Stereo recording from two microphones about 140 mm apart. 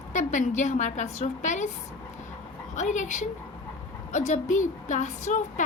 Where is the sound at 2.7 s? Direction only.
60° left (ahead or behind).